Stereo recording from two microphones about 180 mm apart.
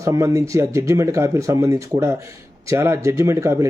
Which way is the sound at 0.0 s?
15° right (ahead or behind).